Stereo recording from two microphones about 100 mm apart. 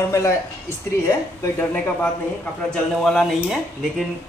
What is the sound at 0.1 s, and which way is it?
A man's voice, 30° left (ahead or behind).